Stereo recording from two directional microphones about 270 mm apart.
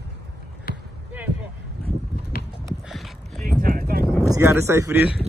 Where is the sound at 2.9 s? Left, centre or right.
Centre.